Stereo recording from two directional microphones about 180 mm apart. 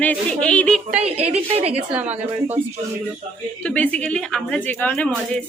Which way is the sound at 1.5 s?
35° right (ahead or behind).